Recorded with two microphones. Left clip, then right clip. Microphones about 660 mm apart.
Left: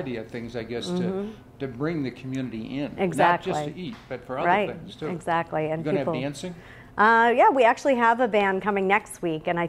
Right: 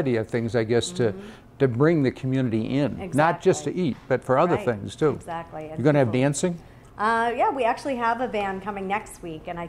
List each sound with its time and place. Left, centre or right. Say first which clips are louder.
0.0 s speech: right 8 dB; right
5.2 s a woman's voice: left 8 dB; left
5.9 s speech: right 6 dB; right
7.0 s a woman's voice: left 5 dB; left